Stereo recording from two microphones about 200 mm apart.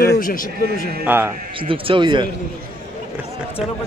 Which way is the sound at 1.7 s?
25° right (ahead or behind).